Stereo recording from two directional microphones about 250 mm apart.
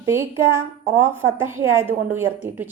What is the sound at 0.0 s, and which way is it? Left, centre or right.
A woman's voice, centre.